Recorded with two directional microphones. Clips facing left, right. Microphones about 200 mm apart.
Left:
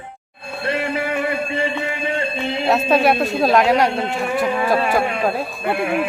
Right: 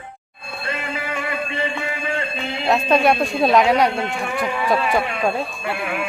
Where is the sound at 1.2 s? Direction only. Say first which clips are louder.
Left 4 dB; 30° left (ahead or behind).